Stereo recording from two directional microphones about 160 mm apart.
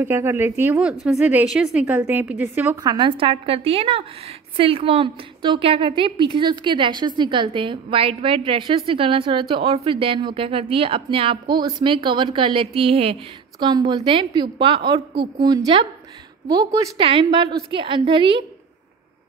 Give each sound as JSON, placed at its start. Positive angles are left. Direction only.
{"t": 0.0, "sound": "a woman's voice", "side_deg": -15}
{"t": 17.0, "sound": "speech", "side_deg": -35}